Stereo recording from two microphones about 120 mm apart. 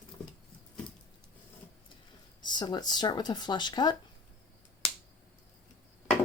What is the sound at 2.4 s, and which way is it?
Speech, 40° left (ahead or behind).